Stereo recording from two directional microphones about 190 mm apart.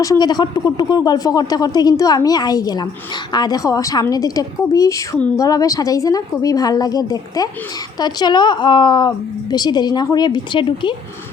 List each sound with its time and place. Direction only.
0.0 s a woman's voice: 20° left (ahead or behind)